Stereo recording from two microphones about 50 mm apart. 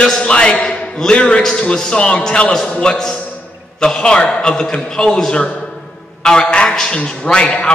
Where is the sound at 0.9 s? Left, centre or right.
Centre.